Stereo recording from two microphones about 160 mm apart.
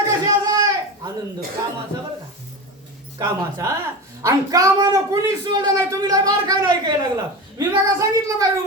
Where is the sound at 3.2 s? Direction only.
20° right (ahead or behind).